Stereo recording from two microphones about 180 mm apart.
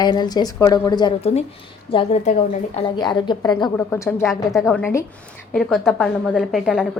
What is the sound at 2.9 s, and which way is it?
Speech, 25° left (ahead or behind).